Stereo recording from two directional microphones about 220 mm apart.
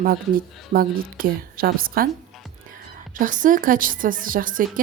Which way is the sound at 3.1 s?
35° right (ahead or behind).